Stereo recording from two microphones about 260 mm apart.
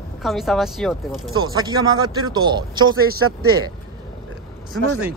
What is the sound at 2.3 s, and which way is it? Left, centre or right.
Speech, centre.